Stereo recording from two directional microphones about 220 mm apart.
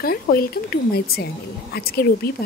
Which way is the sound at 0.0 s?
45° left (ahead or behind).